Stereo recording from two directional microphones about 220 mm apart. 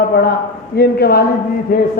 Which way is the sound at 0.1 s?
45° left (ahead or behind).